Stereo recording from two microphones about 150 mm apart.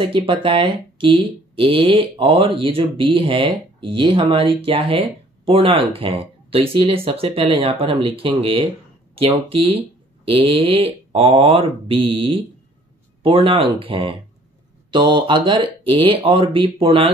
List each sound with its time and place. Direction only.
0.0 s speech: 35° right (ahead or behind)